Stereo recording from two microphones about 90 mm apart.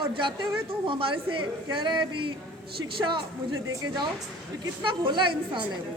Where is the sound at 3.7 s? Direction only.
50° right (ahead or behind); by 5.6 s 65° right (ahead or behind).